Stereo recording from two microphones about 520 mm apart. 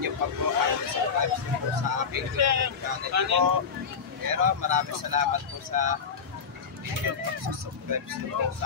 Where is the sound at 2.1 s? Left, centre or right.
Right.